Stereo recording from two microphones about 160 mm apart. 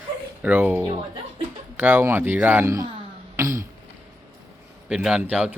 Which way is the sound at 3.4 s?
20° right (ahead or behind).